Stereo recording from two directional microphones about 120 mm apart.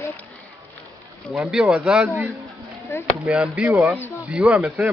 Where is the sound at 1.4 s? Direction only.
5° right (ahead or behind).